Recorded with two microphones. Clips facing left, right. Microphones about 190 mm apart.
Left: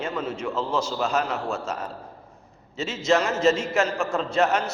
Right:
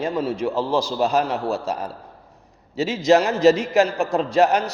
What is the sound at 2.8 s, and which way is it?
A man's voice, 35° right (ahead or behind).